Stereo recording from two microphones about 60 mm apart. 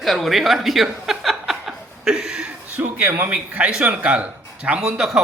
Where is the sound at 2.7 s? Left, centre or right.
Right.